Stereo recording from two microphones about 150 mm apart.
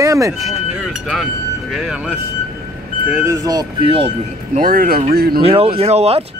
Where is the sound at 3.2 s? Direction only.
25° right (ahead or behind).